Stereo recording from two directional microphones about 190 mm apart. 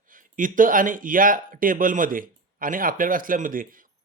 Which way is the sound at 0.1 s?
45° right (ahead or behind).